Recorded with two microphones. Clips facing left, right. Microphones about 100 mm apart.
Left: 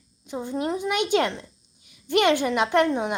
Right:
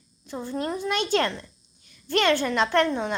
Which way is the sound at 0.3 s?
15° left (ahead or behind).